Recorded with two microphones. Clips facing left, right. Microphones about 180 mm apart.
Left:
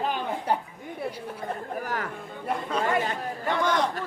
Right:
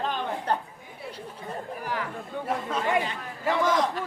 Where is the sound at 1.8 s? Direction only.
45° left (ahead or behind).